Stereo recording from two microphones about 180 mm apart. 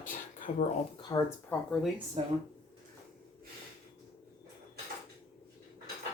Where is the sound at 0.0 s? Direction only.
45° left (ahead or behind).